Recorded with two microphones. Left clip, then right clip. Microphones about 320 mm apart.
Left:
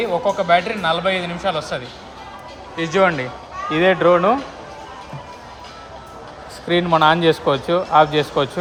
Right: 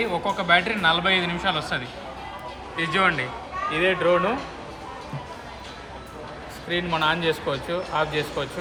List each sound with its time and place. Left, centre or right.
0.0 s speech: centre
6.7 s speech: left